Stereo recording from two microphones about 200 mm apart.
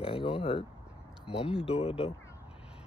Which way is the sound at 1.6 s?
30° left (ahead or behind).